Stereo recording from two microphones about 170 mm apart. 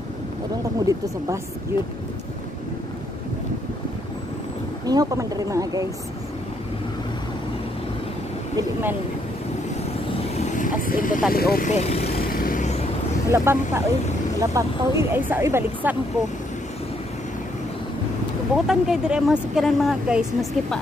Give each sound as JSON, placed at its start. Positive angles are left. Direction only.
{"t": 0.7, "sound": "speech", "side_deg": -20}
{"t": 4.8, "sound": "speech", "side_deg": -20}
{"t": 10.0, "sound": "vehicle", "side_deg": 40}
{"t": 11.3, "sound": "speech", "side_deg": 60}
{"t": 11.7, "sound": "speech", "side_deg": 40}
{"t": 12.2, "sound": "vehicle", "side_deg": 55}
{"t": 13.3, "sound": "speech", "side_deg": -15}
{"t": 18.7, "sound": "speech", "side_deg": -5}